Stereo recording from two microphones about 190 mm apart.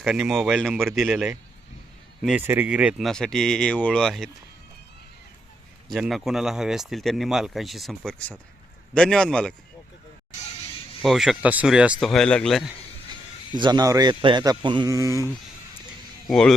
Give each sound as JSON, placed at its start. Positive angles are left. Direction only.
{"t": 0.0, "sound": "speech", "side_deg": 0}
{"t": 5.9, "sound": "speech", "side_deg": 0}
{"t": 11.0, "sound": "speech", "side_deg": 0}
{"t": 13.6, "sound": "speech", "side_deg": -20}
{"t": 16.2, "sound": "speech", "side_deg": 5}